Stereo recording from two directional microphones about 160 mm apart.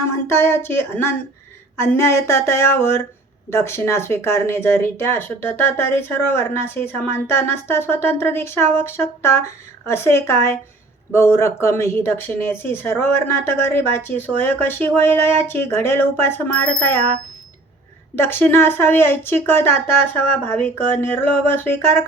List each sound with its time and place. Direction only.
0.0 s speech: 15° left (ahead or behind)
18.2 s speech: 15° left (ahead or behind)